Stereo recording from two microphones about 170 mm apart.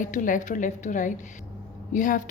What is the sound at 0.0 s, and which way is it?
A woman's voice, 50° left (ahead or behind).